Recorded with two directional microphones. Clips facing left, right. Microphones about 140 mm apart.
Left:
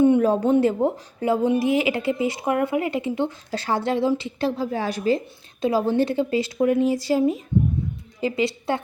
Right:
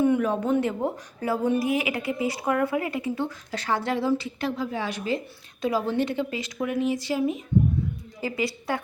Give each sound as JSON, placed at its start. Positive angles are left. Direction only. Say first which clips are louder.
{"t": 0.0, "sound": "a woman's voice", "louder": "left 5 dB", "side_deg": 30}
{"t": 8.2, "sound": "speech", "louder": "left 5 dB", "side_deg": 25}